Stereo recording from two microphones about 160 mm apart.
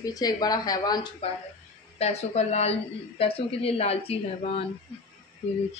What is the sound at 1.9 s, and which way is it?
A woman's voice, 45° left (ahead or behind).